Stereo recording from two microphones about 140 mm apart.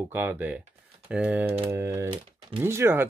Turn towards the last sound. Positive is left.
turn(degrees=-15)  # may be behind; listen again after turning